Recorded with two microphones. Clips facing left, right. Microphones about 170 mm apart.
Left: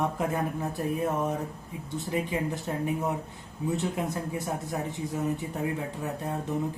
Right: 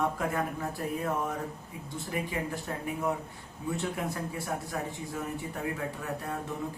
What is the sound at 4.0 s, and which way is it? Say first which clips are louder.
Speech: left 3 dB; 20° left (ahead or behind).